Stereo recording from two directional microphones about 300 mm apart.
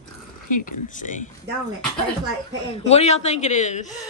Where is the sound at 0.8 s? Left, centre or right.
Left.